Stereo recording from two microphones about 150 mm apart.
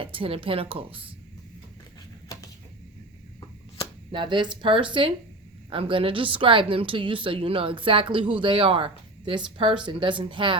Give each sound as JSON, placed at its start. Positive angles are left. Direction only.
{"t": 0.0, "sound": "a woman's voice", "side_deg": -35}
{"t": 2.3, "sound": "a sound", "side_deg": 25}
{"t": 4.1, "sound": "a woman's voice", "side_deg": -30}